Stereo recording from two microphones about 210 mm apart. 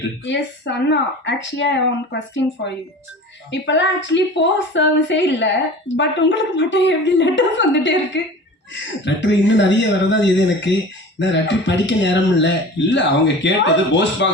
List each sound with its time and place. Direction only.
0.3 s speech: 55° left (ahead or behind)